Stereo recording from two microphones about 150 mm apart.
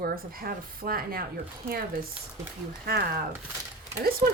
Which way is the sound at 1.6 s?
85° right.